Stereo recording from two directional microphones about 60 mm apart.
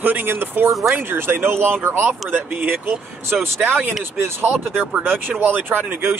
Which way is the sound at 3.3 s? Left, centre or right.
Centre.